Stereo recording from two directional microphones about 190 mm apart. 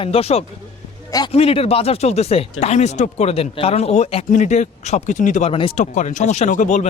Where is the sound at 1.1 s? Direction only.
20° left (ahead or behind).